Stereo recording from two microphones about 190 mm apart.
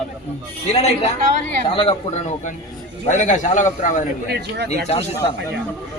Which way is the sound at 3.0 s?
40° left (ahead or behind).